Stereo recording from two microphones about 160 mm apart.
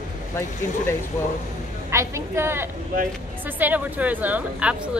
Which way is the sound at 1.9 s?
15° right (ahead or behind).